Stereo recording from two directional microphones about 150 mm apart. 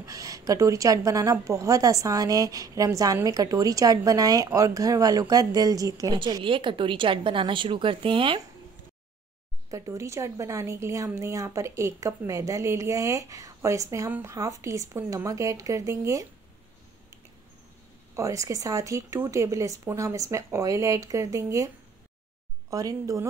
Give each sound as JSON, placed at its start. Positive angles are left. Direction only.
{"t": 0.0, "sound": "a woman's voice", "side_deg": -20}
{"t": 9.7, "sound": "a woman's voice", "side_deg": -20}
{"t": 18.1, "sound": "a woman's voice", "side_deg": -20}
{"t": 22.7, "sound": "a woman's voice", "side_deg": -20}